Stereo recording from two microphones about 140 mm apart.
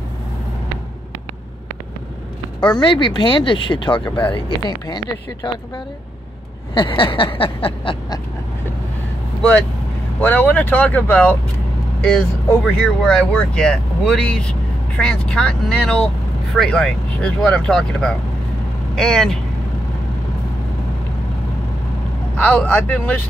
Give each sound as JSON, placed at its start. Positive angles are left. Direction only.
{"t": 2.7, "sound": "speech", "side_deg": 35}
{"t": 6.7, "sound": "speech", "side_deg": 35}
{"t": 10.2, "sound": "speech", "side_deg": 15}
{"t": 22.4, "sound": "speech", "side_deg": 10}